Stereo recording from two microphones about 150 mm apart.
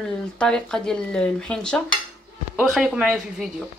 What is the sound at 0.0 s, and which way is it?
Speech, 5° left (ahead or behind).